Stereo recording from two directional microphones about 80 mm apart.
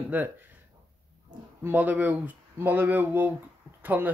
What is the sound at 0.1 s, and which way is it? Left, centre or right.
Speech, right.